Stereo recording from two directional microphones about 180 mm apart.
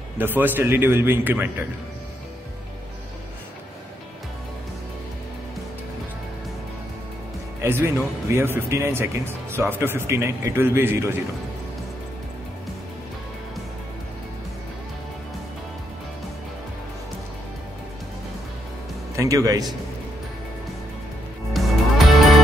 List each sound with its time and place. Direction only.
0.2 s speech: 10° right (ahead or behind)
7.6 s speech: 10° right (ahead or behind)
19.1 s speech: 20° right (ahead or behind)
21.5 s music: centre (ahead or behind)